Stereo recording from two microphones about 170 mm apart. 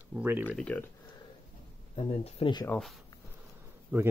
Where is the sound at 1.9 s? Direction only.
35° left (ahead or behind).